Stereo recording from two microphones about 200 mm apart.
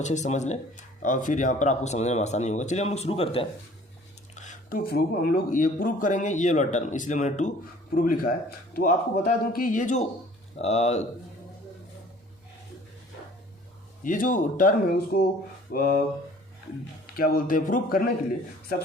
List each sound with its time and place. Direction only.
0.0 s speech: 35° left (ahead or behind)
4.4 s speech: 40° left (ahead or behind)
14.0 s speech: 40° left (ahead or behind)
17.2 s speech: 45° left (ahead or behind)